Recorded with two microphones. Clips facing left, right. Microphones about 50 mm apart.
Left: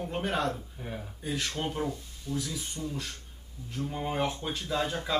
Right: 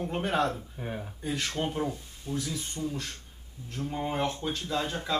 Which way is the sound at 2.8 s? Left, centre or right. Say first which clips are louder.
Right 2 dB; centre.